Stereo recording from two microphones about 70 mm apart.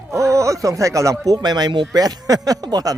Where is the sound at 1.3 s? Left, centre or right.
Right.